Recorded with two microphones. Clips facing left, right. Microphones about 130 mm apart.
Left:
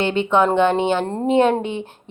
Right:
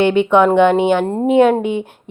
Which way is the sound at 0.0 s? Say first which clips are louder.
Right 5 dB; 15° right (ahead or behind).